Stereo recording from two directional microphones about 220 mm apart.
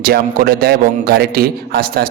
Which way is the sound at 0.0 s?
40° right (ahead or behind).